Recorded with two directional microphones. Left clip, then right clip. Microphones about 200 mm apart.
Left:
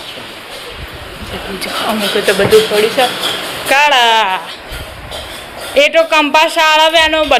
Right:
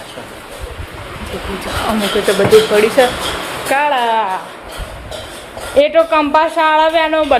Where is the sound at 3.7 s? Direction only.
5° left (ahead or behind).